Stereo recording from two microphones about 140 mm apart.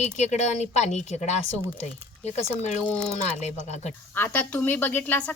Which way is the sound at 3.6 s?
55° left (ahead or behind).